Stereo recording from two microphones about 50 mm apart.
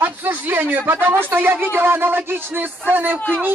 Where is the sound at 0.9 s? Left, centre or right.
Right.